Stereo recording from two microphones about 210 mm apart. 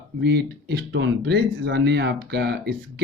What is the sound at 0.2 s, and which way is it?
Speech, 50° right (ahead or behind).